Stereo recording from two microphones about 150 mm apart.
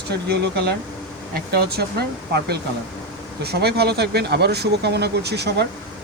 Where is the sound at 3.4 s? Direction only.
90° right.